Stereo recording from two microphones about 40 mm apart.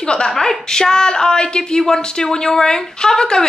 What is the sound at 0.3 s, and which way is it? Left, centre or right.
A woman's voice, centre.